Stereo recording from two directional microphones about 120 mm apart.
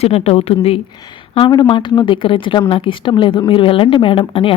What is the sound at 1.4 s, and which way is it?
A woman's voice, 40° left (ahead or behind).